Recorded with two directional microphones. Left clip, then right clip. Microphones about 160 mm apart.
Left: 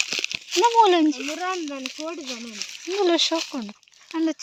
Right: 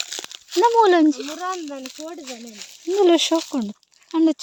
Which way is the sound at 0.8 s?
90° right.